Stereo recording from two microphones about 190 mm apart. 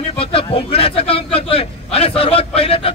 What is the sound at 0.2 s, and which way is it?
A man's voice, 30° left (ahead or behind).